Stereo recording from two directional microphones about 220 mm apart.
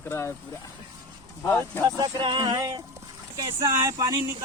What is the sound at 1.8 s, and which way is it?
Speech, 15° right (ahead or behind).